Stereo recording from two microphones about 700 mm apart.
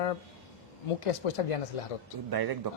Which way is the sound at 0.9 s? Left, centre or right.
Left.